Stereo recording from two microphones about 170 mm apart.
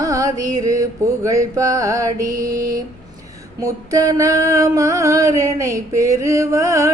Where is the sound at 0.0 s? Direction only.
20° right (ahead or behind).